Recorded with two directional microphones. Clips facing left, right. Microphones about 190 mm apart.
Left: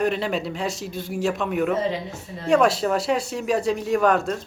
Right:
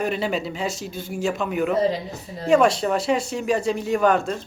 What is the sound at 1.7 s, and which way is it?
Speech, 35° right (ahead or behind).